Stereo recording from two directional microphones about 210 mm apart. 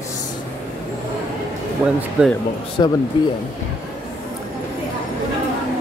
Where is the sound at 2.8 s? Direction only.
20° left (ahead or behind).